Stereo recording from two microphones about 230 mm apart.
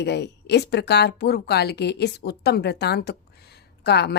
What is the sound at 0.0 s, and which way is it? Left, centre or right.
A woman's voice, left.